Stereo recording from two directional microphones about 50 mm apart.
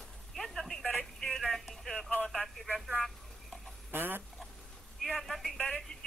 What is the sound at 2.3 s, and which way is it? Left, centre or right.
Telephone, centre.